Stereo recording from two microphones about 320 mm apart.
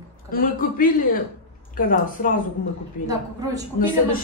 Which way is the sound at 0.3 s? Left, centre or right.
Left.